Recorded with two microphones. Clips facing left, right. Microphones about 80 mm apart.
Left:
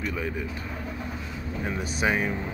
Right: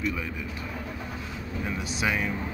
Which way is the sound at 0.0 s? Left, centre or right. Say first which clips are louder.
Even; left.